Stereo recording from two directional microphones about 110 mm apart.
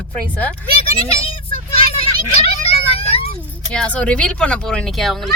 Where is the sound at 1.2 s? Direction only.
55° left (ahead or behind).